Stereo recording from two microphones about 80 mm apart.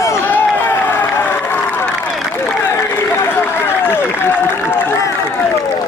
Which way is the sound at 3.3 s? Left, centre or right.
Left.